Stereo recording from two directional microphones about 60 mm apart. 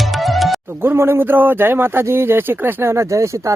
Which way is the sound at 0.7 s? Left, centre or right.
Right.